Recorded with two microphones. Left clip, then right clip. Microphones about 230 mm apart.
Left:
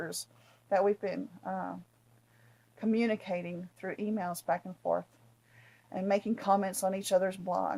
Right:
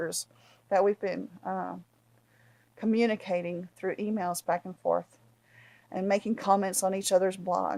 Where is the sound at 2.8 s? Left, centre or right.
Right.